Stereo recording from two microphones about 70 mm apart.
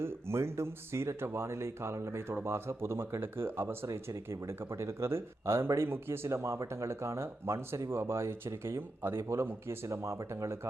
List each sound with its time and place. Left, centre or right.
0.0 s speech: right